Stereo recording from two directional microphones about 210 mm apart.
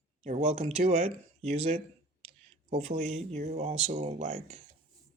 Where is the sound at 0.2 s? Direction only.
30° right (ahead or behind).